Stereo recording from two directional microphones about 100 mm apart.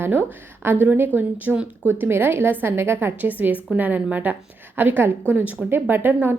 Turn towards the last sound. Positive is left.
turn(degrees=-20)  # may be behind; listen again after turning